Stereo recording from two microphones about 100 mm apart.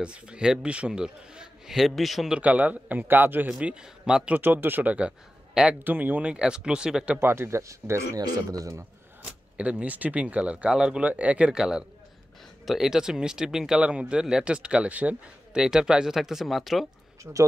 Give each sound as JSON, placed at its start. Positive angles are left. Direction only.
{"t": 0.0, "sound": "a man's voice", "side_deg": -10}
{"t": 2.3, "sound": "a man's voice", "side_deg": -15}
{"t": 7.2, "sound": "speech", "side_deg": -25}
{"t": 8.2, "sound": "a man's voice", "side_deg": -40}
{"t": 9.2, "sound": "a man's voice", "side_deg": -10}
{"t": 17.2, "sound": "speech", "side_deg": -35}